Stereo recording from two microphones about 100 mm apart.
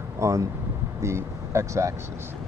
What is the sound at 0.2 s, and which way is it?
Speech, 30° right (ahead or behind).